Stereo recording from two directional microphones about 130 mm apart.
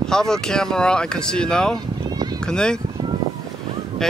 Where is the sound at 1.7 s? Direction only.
30° right (ahead or behind).